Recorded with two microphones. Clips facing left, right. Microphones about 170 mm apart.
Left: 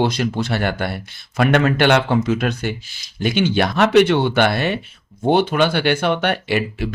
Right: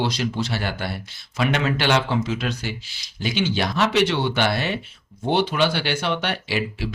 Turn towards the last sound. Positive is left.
turn(degrees=55)  # may be behind; listen again after turning